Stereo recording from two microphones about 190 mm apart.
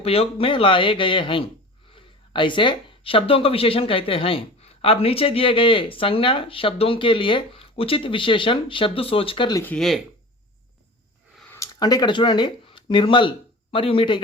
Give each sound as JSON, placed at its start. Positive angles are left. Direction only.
{"t": 0.0, "sound": "speech", "side_deg": 30}
{"t": 9.6, "sound": "speech", "side_deg": 5}
{"t": 11.3, "sound": "speech", "side_deg": 10}